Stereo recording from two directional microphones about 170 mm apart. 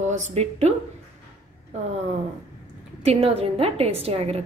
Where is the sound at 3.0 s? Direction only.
35° right (ahead or behind).